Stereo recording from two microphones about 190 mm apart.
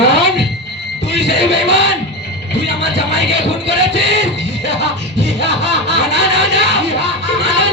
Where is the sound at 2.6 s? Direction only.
65° right (ahead or behind).